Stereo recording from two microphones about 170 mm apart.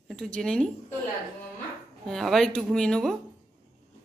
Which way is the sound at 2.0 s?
Centre (ahead or behind).